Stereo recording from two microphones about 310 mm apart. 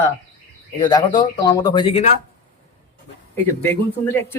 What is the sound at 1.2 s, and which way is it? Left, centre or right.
Speech, centre.